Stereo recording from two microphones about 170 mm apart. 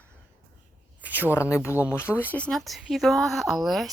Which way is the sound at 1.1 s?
15° left (ahead or behind).